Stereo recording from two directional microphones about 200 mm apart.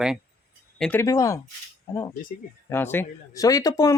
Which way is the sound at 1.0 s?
15° left (ahead or behind).